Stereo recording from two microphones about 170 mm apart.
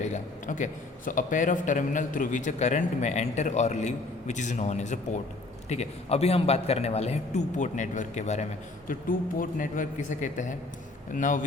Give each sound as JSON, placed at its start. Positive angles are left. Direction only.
{"t": 0.0, "sound": "a man's voice", "side_deg": 45}
{"t": 8.9, "sound": "a man's voice", "side_deg": 55}